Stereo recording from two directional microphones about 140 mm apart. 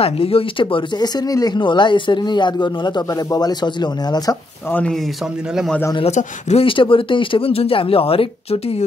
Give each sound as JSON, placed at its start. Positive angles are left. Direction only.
{"t": 0.0, "sound": "speech", "side_deg": 40}
{"t": 4.6, "sound": "speech", "side_deg": 15}
{"t": 6.1, "sound": "speech", "side_deg": 45}